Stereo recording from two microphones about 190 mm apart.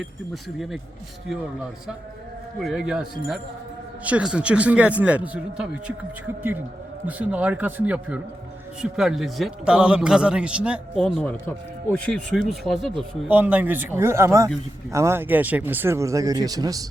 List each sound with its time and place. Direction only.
2.6 s a man's voice: centre (ahead or behind)
7.1 s a man's voice: 5° right (ahead or behind)
11.0 s a man's voice: 5° left (ahead or behind)
13.2 s speech: 10° right (ahead or behind)